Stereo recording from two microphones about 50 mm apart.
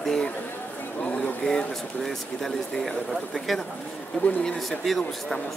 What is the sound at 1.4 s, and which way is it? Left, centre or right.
Speech, left.